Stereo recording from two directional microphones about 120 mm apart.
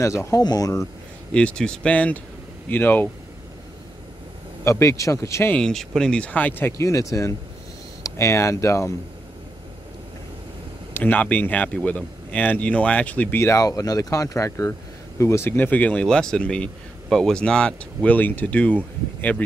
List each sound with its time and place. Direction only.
0.0 s speech: 25° left (ahead or behind)
1.3 s speech: 10° left (ahead or behind)
4.6 s speech: 25° left (ahead or behind)
5.6 s speech: 5° left (ahead or behind); by 8.9 s 25° left (ahead or behind)
10.9 s speech: 15° left (ahead or behind)